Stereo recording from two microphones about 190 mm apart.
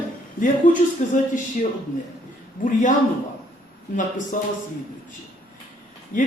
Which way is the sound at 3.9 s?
45° left (ahead or behind).